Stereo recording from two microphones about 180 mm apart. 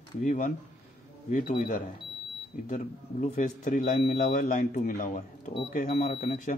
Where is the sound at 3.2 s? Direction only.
45° left (ahead or behind).